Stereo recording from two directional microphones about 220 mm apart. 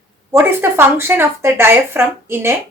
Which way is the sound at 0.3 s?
10° right (ahead or behind).